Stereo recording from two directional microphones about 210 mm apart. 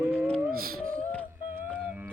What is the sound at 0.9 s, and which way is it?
Beatboxing, 5° left (ahead or behind).